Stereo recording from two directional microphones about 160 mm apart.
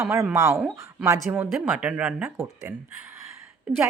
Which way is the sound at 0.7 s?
20° right (ahead or behind).